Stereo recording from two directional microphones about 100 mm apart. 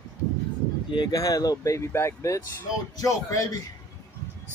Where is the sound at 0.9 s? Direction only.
40° left (ahead or behind).